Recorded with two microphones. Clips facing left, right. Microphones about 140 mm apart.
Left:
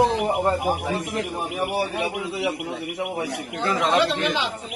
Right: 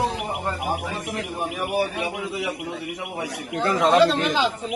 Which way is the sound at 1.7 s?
25° left (ahead or behind).